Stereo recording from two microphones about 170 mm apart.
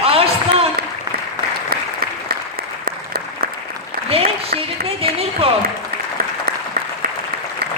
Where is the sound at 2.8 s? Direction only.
60° right (ahead or behind).